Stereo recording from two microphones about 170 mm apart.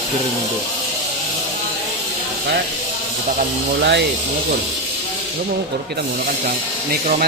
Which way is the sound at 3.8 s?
90° right.